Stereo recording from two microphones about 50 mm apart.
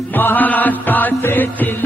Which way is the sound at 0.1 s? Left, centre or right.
Left.